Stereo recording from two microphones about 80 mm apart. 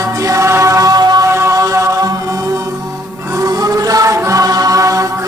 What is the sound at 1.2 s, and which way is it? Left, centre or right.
Chant, right.